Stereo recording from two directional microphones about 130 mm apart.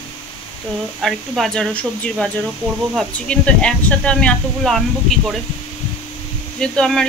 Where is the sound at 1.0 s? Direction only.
Centre (ahead or behind).